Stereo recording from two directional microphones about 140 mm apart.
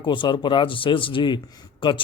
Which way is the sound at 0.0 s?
35° left (ahead or behind).